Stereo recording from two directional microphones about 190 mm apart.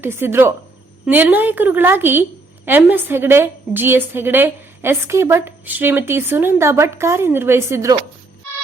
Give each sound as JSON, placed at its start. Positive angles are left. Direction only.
{"t": 0.0, "sound": "a woman's voice", "side_deg": -10}